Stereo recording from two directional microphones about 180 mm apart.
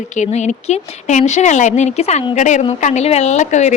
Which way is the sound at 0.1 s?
40° left (ahead or behind).